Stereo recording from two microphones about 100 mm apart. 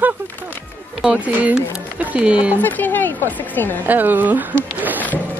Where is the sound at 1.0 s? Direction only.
10° right (ahead or behind).